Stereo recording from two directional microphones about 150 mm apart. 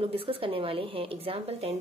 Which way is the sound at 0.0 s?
40° right (ahead or behind).